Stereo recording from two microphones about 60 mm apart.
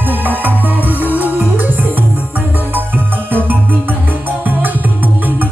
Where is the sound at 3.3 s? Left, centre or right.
Right.